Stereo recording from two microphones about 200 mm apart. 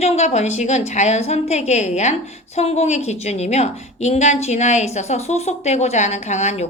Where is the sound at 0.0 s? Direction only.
35° left (ahead or behind).